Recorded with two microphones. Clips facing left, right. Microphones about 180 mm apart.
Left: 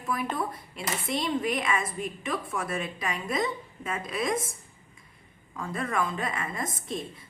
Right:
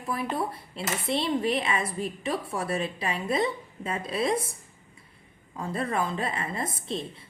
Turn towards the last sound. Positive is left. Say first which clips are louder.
# right 2 dB
turn(degrees=-30)  # may be behind; listen again after turning